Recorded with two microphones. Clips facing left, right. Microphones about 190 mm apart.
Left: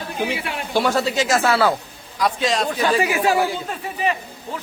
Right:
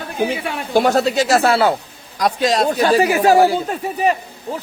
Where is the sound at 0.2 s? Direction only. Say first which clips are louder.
Right 5 dB; 45° right (ahead or behind); by 1.7 s 30° right (ahead or behind).